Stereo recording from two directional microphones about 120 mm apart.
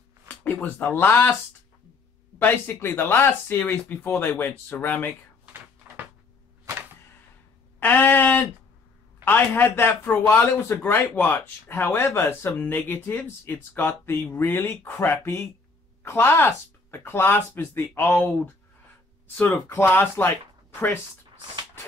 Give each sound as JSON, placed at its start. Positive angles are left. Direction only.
{"t": 0.4, "sound": "speech", "side_deg": 10}
{"t": 2.3, "sound": "a man's voice", "side_deg": 15}
{"t": 5.4, "sound": "a sound", "side_deg": -15}
{"t": 7.8, "sound": "a sound", "side_deg": 15}
{"t": 9.2, "sound": "a man's voice", "side_deg": 15}
{"t": 19.7, "sound": "a man's voice", "side_deg": 15}